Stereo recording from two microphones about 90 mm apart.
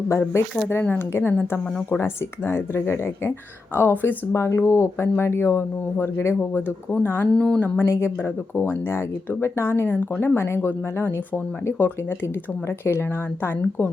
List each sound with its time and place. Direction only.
0.1 s speech: 30° left (ahead or behind)
2.5 s speech: 25° left (ahead or behind)
13.6 s speech: 20° left (ahead or behind)